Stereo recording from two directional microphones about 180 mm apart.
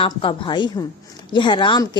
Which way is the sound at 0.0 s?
30° left (ahead or behind).